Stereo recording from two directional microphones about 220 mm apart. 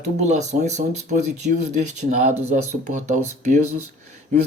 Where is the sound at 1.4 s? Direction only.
40° right (ahead or behind).